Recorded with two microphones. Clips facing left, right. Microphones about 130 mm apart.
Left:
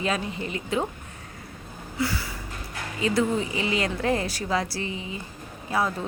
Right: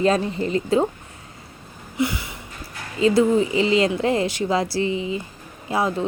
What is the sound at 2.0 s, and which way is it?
Speech, 20° right (ahead or behind).